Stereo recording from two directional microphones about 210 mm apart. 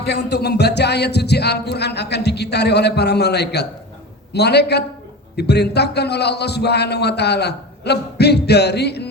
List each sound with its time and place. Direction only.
0.0 s a man's voice: 50° left (ahead or behind)